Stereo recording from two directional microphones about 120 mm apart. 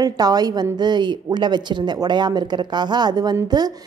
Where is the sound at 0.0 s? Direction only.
35° right (ahead or behind).